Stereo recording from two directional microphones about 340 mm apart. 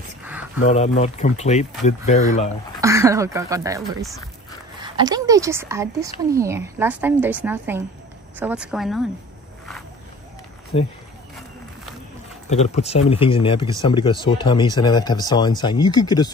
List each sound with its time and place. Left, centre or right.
0.2 s a sound: centre
0.6 s speech: centre
2.8 s a woman's voice: centre
10.7 s speech: centre
12.4 s speech: centre